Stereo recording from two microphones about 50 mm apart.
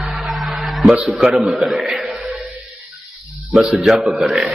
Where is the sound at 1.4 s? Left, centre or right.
Centre.